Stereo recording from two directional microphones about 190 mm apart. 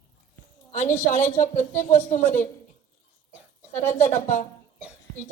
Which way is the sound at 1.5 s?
40° left (ahead or behind).